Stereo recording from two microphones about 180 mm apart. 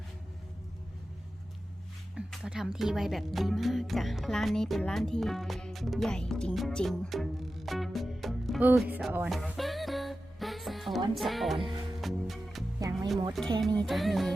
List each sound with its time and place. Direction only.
2.1 s speech: 5° right (ahead or behind)
11.1 s music: centre (ahead or behind)
12.8 s music: 20° right (ahead or behind)
13.4 s music: centre (ahead or behind)